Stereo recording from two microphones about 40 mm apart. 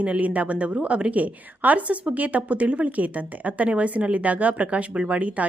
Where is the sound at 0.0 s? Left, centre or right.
Right.